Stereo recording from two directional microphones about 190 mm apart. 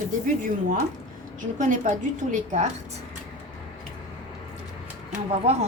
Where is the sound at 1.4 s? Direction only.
45° right (ahead or behind).